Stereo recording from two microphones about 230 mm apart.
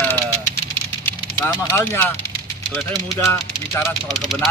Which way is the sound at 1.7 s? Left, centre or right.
Centre.